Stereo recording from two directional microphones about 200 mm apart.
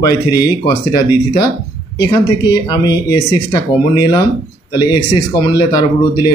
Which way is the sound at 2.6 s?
20° left (ahead or behind).